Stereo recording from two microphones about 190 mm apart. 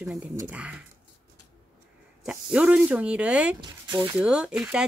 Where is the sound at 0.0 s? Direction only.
10° right (ahead or behind).